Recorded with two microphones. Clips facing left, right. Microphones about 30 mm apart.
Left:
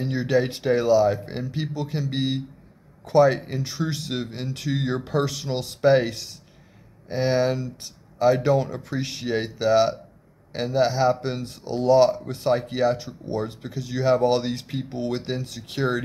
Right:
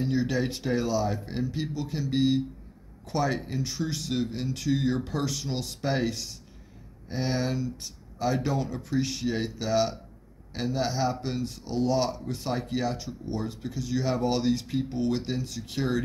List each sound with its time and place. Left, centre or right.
0.0 s speech: centre